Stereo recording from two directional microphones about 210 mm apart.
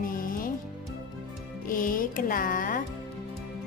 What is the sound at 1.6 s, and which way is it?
Music, 40° left (ahead or behind).